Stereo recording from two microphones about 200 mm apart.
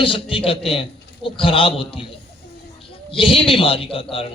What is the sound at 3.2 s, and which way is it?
Speech, 25° left (ahead or behind).